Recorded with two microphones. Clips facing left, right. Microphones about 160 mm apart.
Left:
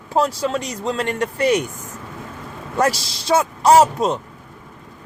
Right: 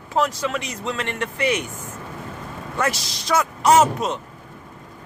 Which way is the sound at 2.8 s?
35° left (ahead or behind).